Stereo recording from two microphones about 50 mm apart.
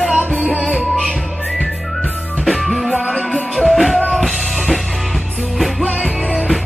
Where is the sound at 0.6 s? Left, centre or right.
Right.